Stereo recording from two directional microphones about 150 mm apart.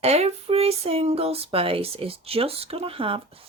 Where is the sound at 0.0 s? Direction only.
45° right (ahead or behind).